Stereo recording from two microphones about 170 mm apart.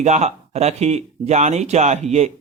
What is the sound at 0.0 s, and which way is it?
Speech, 40° right (ahead or behind).